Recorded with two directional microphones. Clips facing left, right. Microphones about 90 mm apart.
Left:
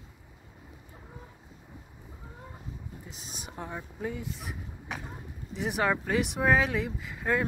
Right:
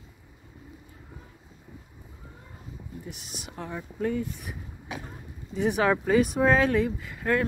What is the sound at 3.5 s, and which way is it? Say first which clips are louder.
Speech: right 3 dB; 15° left (ahead or behind).